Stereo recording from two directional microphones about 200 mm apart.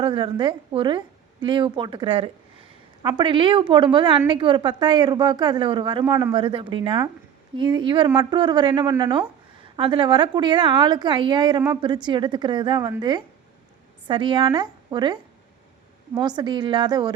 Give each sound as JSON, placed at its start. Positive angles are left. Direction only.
{"t": 0.0, "sound": "a woman's voice", "side_deg": -25}